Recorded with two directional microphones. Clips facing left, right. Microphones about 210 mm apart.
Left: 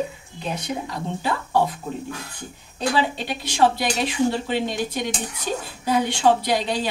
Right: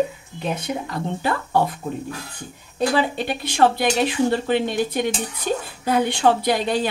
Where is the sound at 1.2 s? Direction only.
55° right (ahead or behind).